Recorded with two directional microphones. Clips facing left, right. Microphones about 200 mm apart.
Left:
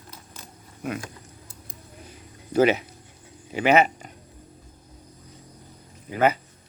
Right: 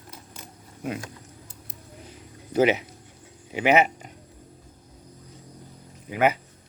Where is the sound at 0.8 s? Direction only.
30° right (ahead or behind).